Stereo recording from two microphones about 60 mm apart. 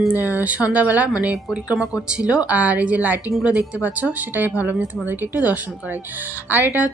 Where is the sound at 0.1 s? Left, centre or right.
Right.